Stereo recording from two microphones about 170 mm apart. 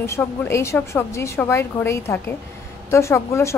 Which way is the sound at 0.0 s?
15° left (ahead or behind).